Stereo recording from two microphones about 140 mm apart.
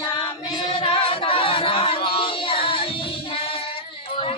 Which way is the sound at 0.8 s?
40° left (ahead or behind).